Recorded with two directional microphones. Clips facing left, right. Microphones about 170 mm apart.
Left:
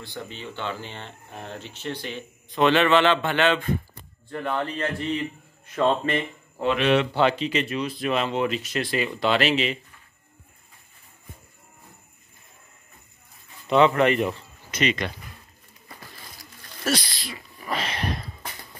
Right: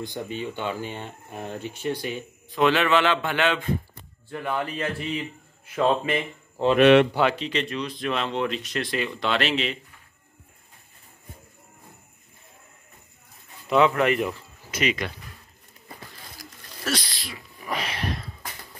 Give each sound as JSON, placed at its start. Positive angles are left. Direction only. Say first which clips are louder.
{"t": 0.0, "sound": "speech", "louder": "right 5 dB", "side_deg": -15}
{"t": 6.8, "sound": "speech", "louder": "right 7 dB", "side_deg": -60}
{"t": 7.2, "sound": "speech", "louder": "left 2 dB", "side_deg": 0}
{"t": 13.7, "sound": "speech", "louder": "left 2 dB", "side_deg": -5}
{"t": 16.9, "sound": "speech", "louder": "left 3 dB", "side_deg": -5}
{"t": 17.6, "sound": "a sound", "louder": "left 1 dB", "side_deg": -15}
{"t": 17.9, "sound": "a sound", "louder": "left 1 dB", "side_deg": 0}